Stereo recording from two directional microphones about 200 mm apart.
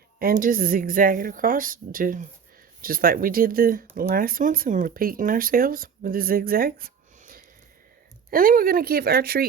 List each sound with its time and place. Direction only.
0.2 s speech: 45° right (ahead or behind)